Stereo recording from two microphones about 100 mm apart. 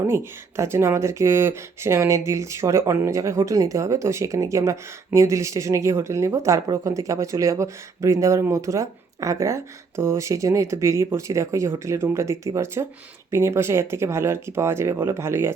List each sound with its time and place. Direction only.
0.1 s speech: 25° right (ahead or behind)